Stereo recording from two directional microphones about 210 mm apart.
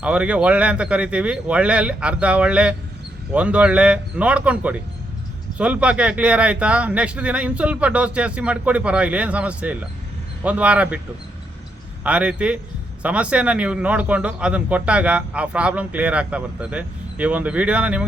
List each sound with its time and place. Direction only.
0.0 s a man's voice: 5° right (ahead or behind)
12.0 s a man's voice: 5° right (ahead or behind)